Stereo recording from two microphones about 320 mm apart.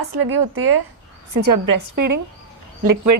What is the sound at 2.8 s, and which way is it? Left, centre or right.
Speech, right.